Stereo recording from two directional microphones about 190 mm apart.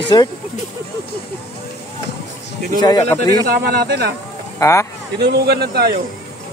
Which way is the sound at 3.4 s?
55° right (ahead or behind).